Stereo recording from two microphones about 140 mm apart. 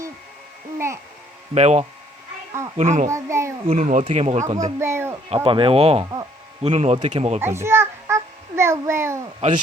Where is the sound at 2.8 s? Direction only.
60° right (ahead or behind).